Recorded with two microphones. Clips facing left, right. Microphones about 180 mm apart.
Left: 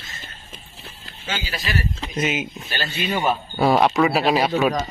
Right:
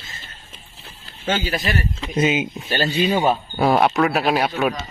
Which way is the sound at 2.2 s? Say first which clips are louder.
Right 5 dB; 25° right (ahead or behind).